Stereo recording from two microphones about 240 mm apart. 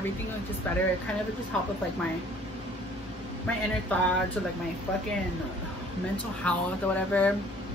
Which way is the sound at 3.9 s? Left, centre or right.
Centre.